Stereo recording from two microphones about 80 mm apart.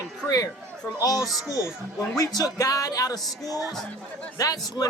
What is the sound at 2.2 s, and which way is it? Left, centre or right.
Speech, left.